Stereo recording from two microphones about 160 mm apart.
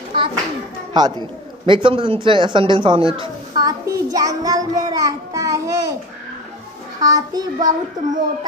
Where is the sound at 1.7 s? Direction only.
30° right (ahead or behind).